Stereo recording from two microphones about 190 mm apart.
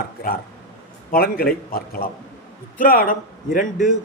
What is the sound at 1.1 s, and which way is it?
A man's voice, 50° left (ahead or behind).